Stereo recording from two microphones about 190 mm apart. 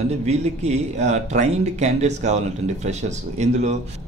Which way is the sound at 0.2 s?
35° right (ahead or behind).